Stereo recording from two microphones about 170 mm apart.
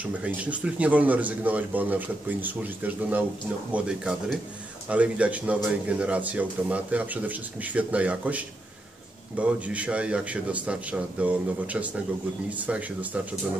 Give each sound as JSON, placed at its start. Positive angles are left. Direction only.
{"t": 0.0, "sound": "a man's voice", "side_deg": -10}